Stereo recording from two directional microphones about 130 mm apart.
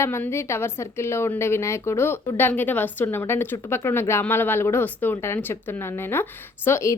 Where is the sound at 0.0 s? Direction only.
20° left (ahead or behind).